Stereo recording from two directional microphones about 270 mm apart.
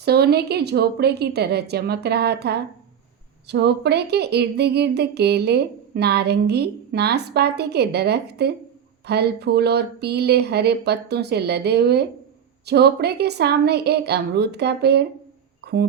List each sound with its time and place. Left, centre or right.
0.0 s speech: right